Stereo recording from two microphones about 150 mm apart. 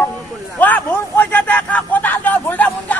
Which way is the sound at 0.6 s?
10° left (ahead or behind).